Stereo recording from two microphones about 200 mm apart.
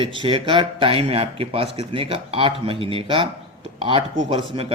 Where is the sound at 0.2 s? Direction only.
25° right (ahead or behind).